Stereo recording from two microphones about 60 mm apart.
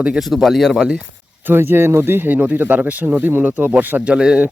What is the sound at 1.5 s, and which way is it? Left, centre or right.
Speech, right.